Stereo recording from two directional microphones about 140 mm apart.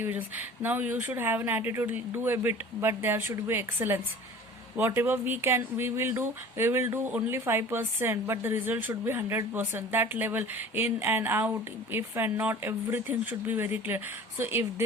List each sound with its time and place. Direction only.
0.0 s speech: 15° right (ahead or behind)